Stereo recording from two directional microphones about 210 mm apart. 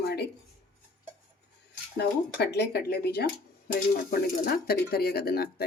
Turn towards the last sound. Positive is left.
turn(degrees=45)  # may be behind; listen again after turning